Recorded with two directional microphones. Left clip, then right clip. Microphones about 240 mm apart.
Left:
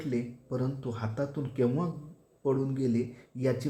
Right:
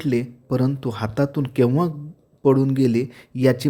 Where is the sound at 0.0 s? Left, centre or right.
Right.